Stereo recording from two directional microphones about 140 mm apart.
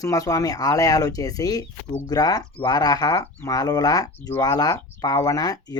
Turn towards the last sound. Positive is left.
turn(degrees=25)  # may be behind; listen again after turning